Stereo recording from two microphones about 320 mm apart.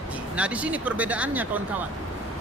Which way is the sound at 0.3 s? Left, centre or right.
Centre.